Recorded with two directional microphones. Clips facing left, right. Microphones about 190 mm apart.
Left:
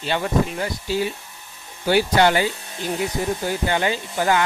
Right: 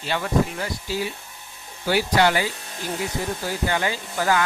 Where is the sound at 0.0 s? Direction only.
25° left (ahead or behind).